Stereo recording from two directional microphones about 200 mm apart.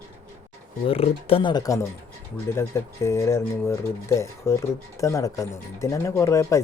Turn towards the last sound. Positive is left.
turn(degrees=15)  # may be behind; listen again after turning